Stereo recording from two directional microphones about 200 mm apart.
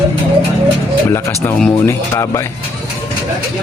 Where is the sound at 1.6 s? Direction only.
15° left (ahead or behind).